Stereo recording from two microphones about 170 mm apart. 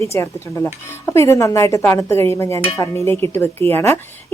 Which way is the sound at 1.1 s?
15° left (ahead or behind).